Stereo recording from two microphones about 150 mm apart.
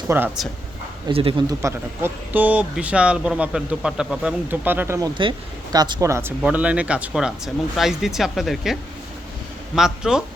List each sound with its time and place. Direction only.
0.1 s speech: 15° right (ahead or behind)
1.0 s speech: 35° right (ahead or behind)
1.5 s speech: 15° right (ahead or behind)
6.4 s speech: 10° right (ahead or behind)